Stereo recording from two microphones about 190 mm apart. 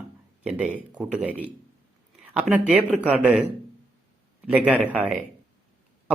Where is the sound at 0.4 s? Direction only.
5° right (ahead or behind).